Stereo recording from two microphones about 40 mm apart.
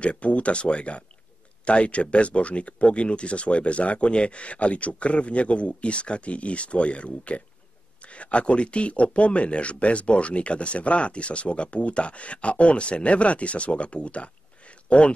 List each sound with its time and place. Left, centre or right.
0.0 s speech: left